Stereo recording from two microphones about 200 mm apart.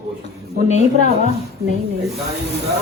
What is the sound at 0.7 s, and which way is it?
Speech, 35° left (ahead or behind).